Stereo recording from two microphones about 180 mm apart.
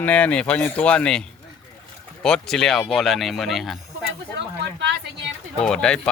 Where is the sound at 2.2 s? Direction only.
5° left (ahead or behind).